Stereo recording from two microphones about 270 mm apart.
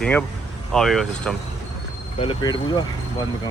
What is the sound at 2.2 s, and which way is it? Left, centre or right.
Speech, centre.